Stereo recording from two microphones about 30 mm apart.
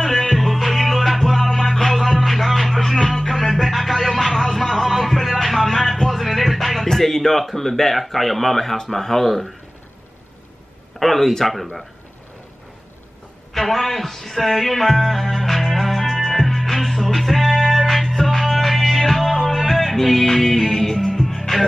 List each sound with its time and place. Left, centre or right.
0.3 s music: centre
1.9 s music: centre
4.7 s a sound: centre
5.7 s a sound: centre
6.0 s speech: centre
11.0 s speech: centre
13.5 s music: centre
17.8 s music: centre